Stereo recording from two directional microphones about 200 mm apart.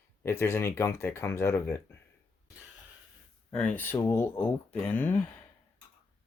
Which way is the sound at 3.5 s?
5° left (ahead or behind).